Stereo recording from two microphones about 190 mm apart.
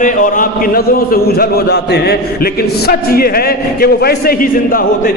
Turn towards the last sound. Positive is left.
turn(degrees=50)  # may be behind; listen again after turning